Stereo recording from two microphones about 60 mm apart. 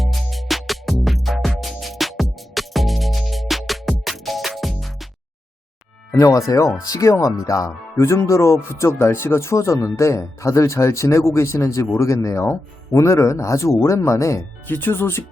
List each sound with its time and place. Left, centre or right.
0.0 s music: centre
6.1 s speech: left
6.5 s speech: left
7.9 s speech: left
11.9 s speech: left
12.4 s speech: left
14.7 s speech: left